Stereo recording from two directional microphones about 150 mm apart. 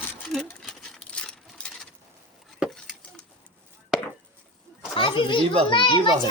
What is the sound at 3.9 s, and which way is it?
Chop, 5° right (ahead or behind).